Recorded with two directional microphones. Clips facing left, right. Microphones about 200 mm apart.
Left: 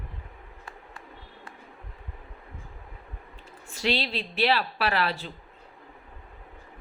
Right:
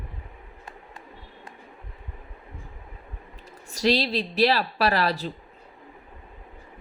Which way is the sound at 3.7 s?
40° right (ahead or behind).